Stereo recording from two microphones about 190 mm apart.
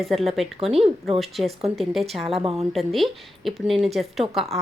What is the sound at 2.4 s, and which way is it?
Speech, 30° right (ahead or behind).